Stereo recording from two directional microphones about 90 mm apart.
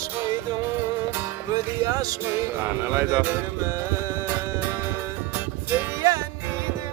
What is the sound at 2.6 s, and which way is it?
Speech, 30° right (ahead or behind).